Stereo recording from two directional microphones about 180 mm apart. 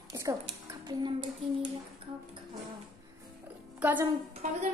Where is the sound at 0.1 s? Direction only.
20° right (ahead or behind).